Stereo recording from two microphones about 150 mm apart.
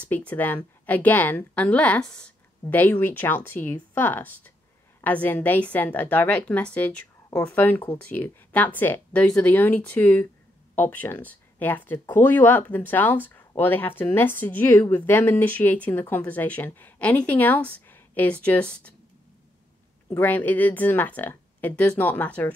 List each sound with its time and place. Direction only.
0.0 s a woman's voice: 10° left (ahead or behind)
20.2 s a woman's voice: 10° left (ahead or behind)